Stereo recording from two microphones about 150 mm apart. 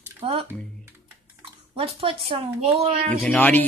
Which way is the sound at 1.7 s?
35° right (ahead or behind).